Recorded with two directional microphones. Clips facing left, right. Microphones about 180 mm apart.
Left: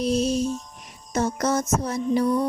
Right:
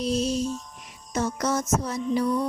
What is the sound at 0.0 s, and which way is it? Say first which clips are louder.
Music: left 3 dB; 55° left (ahead or behind).